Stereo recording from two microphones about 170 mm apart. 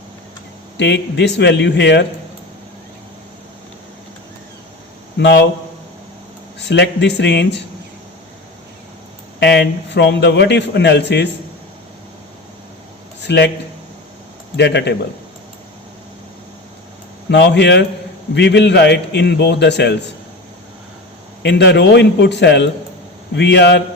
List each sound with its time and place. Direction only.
0.8 s a man's voice: 90° left
5.1 s a man's voice: 90° left
6.6 s a man's voice: 90° left
9.4 s a man's voice: 90° left
13.2 s a man's voice: 90° left
14.5 s a man's voice: 80° left
17.2 s a man's voice: 90° left
21.4 s a man's voice: 90° left